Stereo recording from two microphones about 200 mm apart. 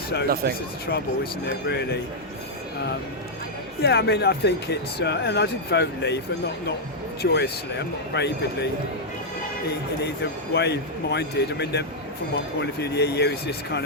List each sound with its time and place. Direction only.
0.4 s speech: 50° right (ahead or behind)
0.9 s speech: 55° left (ahead or behind)
3.8 s speech: 55° left (ahead or behind)
7.2 s speech: 55° left (ahead or behind)
10.5 s speech: 55° left (ahead or behind)